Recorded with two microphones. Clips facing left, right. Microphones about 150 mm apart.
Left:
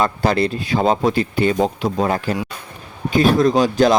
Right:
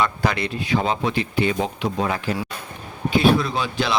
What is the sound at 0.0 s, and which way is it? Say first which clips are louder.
A man's voice: left 5 dB; 35° left (ahead or behind).